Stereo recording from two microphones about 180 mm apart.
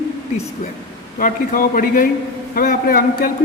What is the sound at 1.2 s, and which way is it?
Speech, 50° left (ahead or behind).